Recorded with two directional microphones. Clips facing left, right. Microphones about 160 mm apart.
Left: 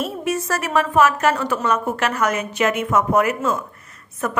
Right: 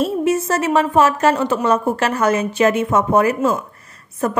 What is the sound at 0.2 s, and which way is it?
A woman's voice, 25° right (ahead or behind).